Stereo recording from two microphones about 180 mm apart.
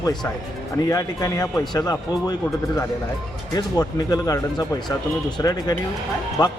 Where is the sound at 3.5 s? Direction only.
20° left (ahead or behind).